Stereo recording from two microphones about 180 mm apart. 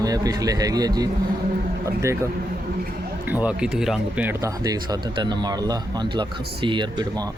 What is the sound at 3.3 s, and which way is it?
Speech, 5° right (ahead or behind).